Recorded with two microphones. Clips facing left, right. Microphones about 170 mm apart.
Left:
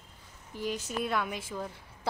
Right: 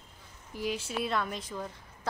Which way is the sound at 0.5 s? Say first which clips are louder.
Right 1 dB; 10° right (ahead or behind).